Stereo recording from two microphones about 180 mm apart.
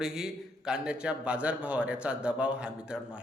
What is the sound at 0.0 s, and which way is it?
Speech, 5° right (ahead or behind).